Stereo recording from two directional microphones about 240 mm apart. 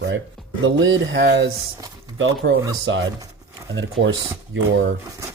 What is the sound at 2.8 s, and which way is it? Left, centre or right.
Speech, right.